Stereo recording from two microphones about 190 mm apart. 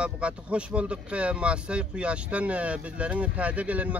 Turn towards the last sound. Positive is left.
turn(degrees=-5)  # may be behind; listen again after turning